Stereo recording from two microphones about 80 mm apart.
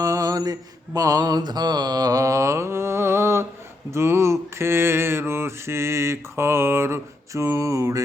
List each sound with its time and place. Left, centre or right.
0.0 s mantra: right